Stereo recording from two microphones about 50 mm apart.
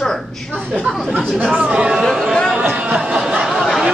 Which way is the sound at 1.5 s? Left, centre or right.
Right.